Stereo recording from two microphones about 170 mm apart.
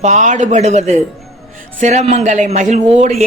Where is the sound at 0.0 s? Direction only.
45° right (ahead or behind).